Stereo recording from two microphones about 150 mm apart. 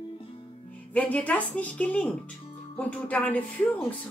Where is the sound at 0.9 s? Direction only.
10° left (ahead or behind).